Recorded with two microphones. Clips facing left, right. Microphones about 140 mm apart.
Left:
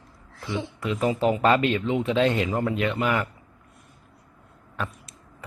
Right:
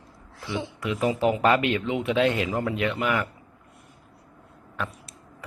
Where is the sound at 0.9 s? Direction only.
10° right (ahead or behind).